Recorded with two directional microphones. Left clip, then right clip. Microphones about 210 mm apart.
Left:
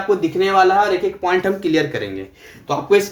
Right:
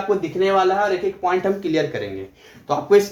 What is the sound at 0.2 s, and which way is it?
Speech, 10° left (ahead or behind).